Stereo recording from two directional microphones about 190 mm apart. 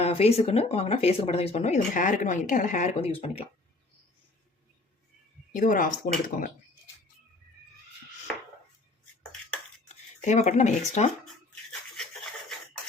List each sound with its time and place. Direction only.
0.0 s speech: 35° left (ahead or behind)
5.5 s speech: 45° left (ahead or behind)
9.9 s speech: 35° left (ahead or behind)